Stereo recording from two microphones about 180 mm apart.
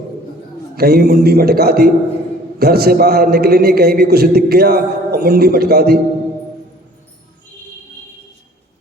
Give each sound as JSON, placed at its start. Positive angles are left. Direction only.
{"t": 0.8, "sound": "a man's voice", "side_deg": -60}